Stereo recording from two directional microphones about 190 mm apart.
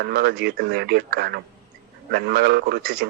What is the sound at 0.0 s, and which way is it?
A man's voice, 55° right (ahead or behind).